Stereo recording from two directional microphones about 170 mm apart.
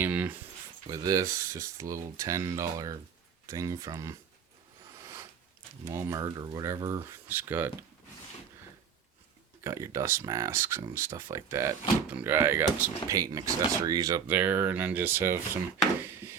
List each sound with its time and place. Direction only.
0.0 s a sound: 10° right (ahead or behind)
0.9 s speech: 20° right (ahead or behind)
5.8 s speech: 15° right (ahead or behind)
9.6 s speech: 15° right (ahead or behind)
14.3 s speech: 10° right (ahead or behind)